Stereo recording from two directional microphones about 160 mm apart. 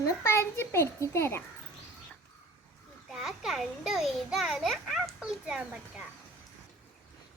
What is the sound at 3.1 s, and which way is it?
A child's voice, 5° right (ahead or behind).